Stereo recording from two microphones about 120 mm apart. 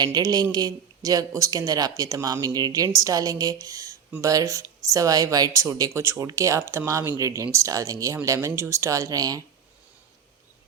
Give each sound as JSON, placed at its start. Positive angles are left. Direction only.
{"t": 0.0, "sound": "speech", "side_deg": -35}